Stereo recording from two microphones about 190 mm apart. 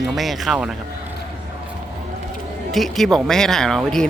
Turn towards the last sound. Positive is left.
turn(degrees=0)  # may be behind; listen again after turning